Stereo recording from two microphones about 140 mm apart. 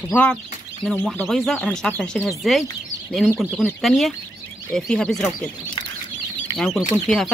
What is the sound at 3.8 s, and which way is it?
Speech, centre (ahead or behind).